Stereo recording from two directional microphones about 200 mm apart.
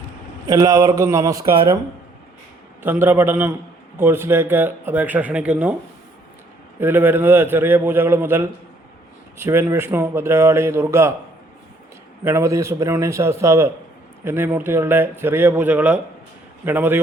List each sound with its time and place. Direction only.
0.4 s speech: 15° right (ahead or behind)
2.8 s speech: 10° right (ahead or behind)
6.7 s speech: 10° right (ahead or behind)
12.2 s speech: 15° right (ahead or behind)